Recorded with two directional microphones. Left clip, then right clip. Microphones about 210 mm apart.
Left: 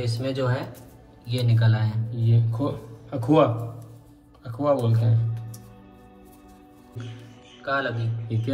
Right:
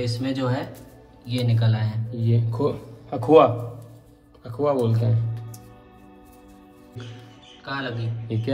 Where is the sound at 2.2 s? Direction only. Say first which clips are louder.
Right 4 dB; 35° right (ahead or behind).